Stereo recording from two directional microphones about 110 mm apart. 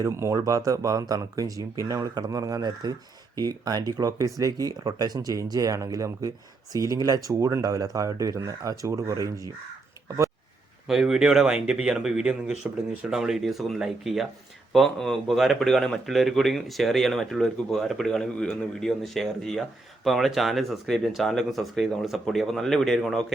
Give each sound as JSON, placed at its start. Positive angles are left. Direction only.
{"t": 0.0, "sound": "speech", "side_deg": -25}
{"t": 10.8, "sound": "speech", "side_deg": -5}